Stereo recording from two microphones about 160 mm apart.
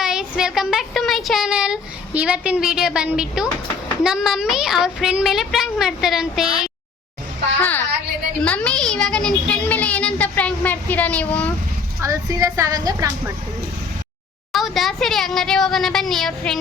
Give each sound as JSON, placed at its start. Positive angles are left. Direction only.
{"t": 0.0, "sound": "speech", "side_deg": -5}
{"t": 8.4, "sound": "a woman's voice", "side_deg": 5}
{"t": 11.9, "sound": "a woman's voice", "side_deg": -20}
{"t": 14.5, "sound": "speech", "side_deg": 0}